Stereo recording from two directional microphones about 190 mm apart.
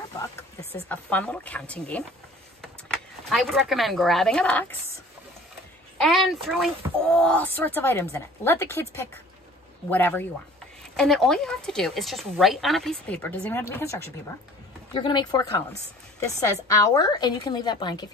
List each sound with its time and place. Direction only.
0.7 s speech: 10° left (ahead or behind)
5.9 s a woman's voice: centre (ahead or behind); by 18.0 s 20° left (ahead or behind)